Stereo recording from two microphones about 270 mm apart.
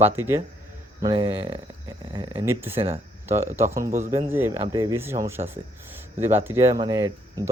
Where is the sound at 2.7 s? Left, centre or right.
Right.